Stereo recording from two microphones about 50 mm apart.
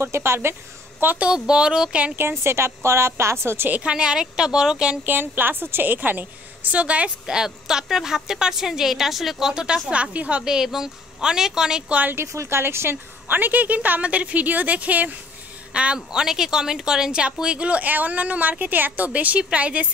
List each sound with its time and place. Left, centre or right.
0.0 s a woman's voice: right
1.0 s a woman's voice: right
1.5 s a woman's voice: centre
2.1 s a woman's voice: right
3.5 s a woman's voice: right
3.8 s a woman's voice: centre
5.0 s a woman's voice: right
7.2 s a woman's voice: centre
10.1 s a woman's voice: right
10.4 s a woman's voice: centre
11.9 s a woman's voice: right
12.3 s a woman's voice: right
15.7 s a woman's voice: centre